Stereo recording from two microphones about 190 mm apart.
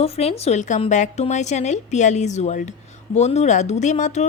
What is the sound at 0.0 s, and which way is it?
A woman's voice, 30° left (ahead or behind).